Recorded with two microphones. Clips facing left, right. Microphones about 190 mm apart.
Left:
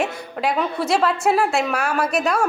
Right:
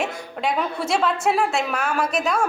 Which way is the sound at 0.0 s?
Centre (ahead or behind).